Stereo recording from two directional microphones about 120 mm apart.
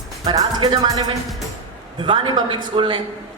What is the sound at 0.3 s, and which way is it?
A man's voice, 35° right (ahead or behind).